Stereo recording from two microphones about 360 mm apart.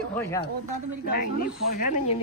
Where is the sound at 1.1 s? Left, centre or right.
Left.